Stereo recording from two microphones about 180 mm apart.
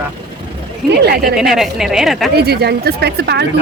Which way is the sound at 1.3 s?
Centre (ahead or behind).